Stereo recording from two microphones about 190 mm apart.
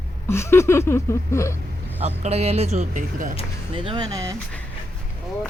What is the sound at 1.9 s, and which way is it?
Speech, 35° right (ahead or behind).